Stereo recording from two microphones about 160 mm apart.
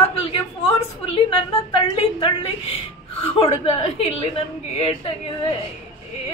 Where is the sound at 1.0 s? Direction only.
35° left (ahead or behind).